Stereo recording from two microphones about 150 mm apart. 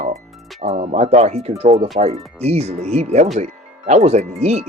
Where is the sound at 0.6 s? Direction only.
45° right (ahead or behind).